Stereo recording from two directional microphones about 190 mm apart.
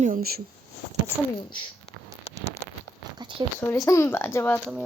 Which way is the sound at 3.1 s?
25° right (ahead or behind).